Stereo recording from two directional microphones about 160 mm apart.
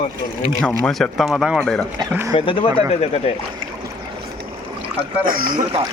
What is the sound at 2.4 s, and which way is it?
Speech, 35° left (ahead or behind).